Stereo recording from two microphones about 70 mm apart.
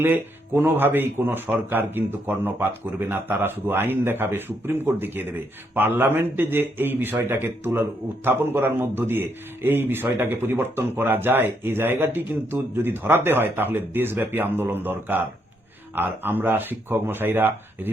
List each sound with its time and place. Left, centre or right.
0.0 s speech: right